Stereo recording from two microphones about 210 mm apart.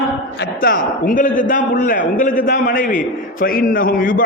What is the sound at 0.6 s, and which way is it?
A man's voice, 40° left (ahead or behind).